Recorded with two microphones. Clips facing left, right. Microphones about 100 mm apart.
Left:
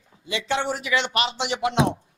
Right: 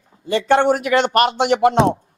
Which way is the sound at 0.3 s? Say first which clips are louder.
Right 11 dB; 50° right (ahead or behind).